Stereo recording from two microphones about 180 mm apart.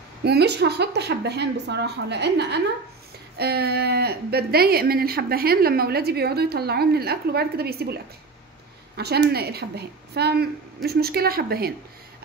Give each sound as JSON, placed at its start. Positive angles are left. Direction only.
{"t": 0.2, "sound": "a woman's voice", "side_deg": -65}
{"t": 8.9, "sound": "speech", "side_deg": -65}